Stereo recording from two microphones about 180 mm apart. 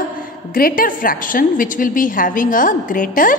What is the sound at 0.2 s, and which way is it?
A woman's voice, 50° left (ahead or behind).